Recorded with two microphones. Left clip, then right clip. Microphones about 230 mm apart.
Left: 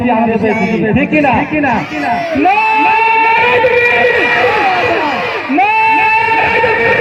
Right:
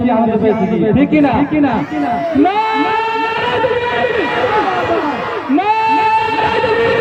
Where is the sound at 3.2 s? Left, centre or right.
Right.